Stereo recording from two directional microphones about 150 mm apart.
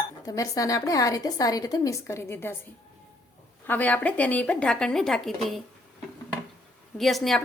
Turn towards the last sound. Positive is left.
turn(degrees=0)  # may be behind; listen again after turning